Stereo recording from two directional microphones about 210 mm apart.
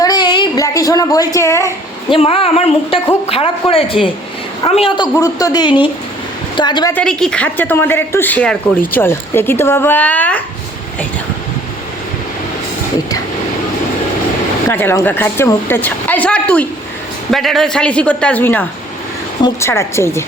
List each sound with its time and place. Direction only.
0.0 s a sound: 20° left (ahead or behind)
2.1 s a woman's voice: 25° left (ahead or behind)
5.1 s a woman's voice: 15° left (ahead or behind)
6.9 s a woman's voice: 5° left (ahead or behind)
14.7 s a woman's voice: 10° left (ahead or behind)